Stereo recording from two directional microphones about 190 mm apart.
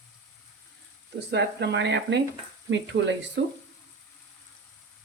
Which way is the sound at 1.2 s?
65° right (ahead or behind).